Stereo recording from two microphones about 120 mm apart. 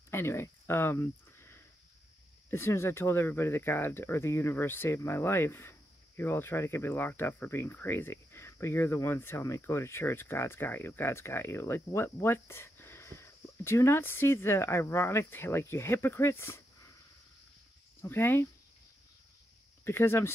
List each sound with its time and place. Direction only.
0.1 s speech: 20° left (ahead or behind)
18.0 s speech: 15° left (ahead or behind)
19.8 s speech: 20° left (ahead or behind)